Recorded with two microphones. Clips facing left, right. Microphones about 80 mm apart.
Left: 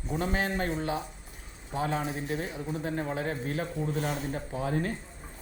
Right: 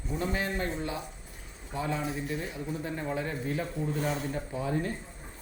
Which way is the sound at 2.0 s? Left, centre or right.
Left.